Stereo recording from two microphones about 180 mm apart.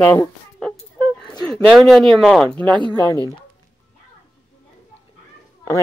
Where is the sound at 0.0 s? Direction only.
10° left (ahead or behind).